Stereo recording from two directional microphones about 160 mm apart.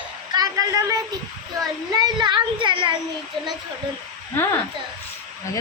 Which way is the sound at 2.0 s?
30° right (ahead or behind).